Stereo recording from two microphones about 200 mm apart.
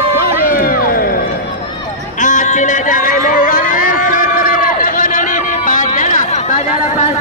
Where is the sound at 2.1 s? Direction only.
40° left (ahead or behind).